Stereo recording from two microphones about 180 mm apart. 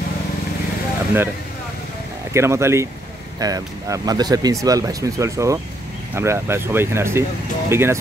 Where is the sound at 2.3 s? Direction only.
15° right (ahead or behind).